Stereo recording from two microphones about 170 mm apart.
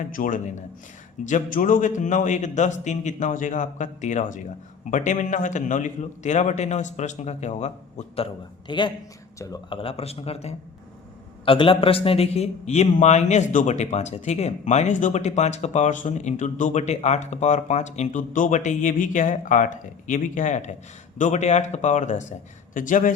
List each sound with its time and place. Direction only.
0.0 s a man's voice: 50° left (ahead or behind)